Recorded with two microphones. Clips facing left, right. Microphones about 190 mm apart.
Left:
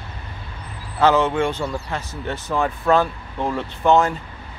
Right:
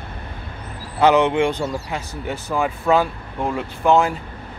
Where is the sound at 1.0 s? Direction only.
15° right (ahead or behind).